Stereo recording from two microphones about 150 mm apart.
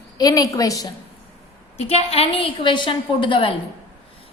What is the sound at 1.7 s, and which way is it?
A woman's voice, 45° left (ahead or behind).